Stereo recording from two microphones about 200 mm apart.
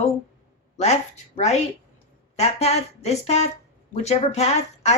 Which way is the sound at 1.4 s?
35° left (ahead or behind).